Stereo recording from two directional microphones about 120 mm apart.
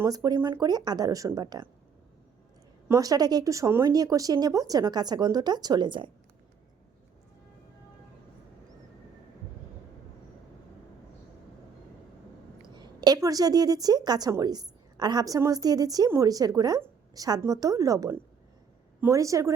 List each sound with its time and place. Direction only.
0.0 s a woman's voice: 30° right (ahead or behind)
2.9 s a woman's voice: 30° right (ahead or behind)
12.8 s a woman's voice: 35° right (ahead or behind)